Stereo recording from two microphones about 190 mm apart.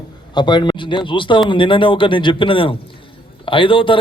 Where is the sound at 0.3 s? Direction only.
25° left (ahead or behind).